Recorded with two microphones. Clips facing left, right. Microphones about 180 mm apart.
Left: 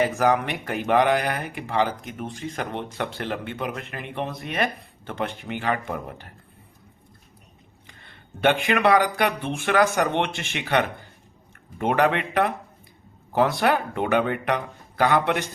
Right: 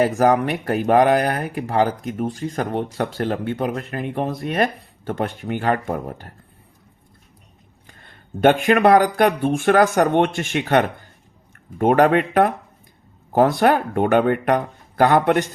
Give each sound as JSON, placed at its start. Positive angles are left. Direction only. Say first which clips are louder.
{"t": 0.0, "sound": "speech", "louder": "right 5 dB", "side_deg": -40}
{"t": 7.9, "sound": "speech", "louder": "right 7 dB", "side_deg": -45}